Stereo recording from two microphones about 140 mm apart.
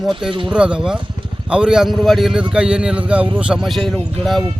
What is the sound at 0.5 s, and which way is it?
A man's voice, 5° right (ahead or behind).